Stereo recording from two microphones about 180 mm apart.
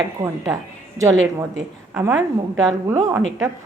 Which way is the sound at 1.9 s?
15° right (ahead or behind).